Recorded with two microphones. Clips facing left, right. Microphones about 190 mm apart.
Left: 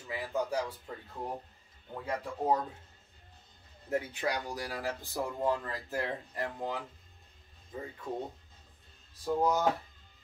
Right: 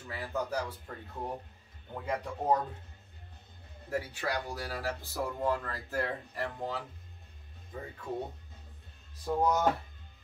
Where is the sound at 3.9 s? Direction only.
20° left (ahead or behind).